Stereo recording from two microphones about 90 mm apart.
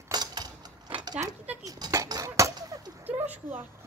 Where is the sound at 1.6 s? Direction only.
40° right (ahead or behind).